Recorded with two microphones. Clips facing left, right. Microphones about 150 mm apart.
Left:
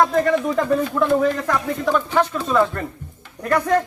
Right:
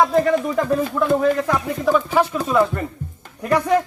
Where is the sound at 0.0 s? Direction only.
Centre (ahead or behind).